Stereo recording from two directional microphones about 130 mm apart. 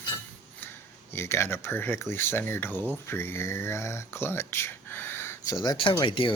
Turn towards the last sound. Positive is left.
turn(degrees=40)  # may be behind; listen again after turning